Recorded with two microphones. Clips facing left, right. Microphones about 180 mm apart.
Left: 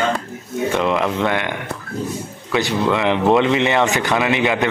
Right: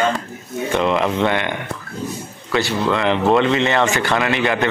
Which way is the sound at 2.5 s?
15° left (ahead or behind).